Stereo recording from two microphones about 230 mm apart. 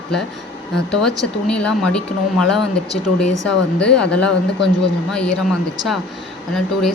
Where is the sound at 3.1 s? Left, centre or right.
Left.